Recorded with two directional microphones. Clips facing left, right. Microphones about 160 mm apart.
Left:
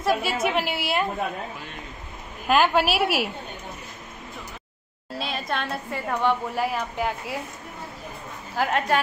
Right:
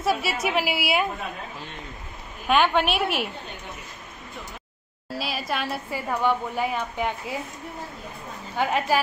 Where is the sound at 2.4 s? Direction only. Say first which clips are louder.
Left 1 dB; centre (ahead or behind).